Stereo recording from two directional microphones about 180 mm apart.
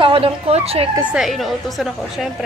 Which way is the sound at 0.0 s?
30° right (ahead or behind).